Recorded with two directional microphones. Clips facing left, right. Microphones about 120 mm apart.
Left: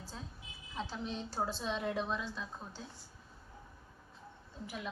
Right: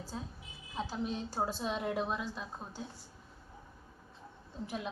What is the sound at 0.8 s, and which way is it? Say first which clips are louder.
A woman's voice: right 3 dB; 10° right (ahead or behind).